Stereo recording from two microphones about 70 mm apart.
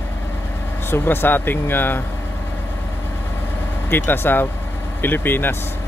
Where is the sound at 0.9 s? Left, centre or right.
Left.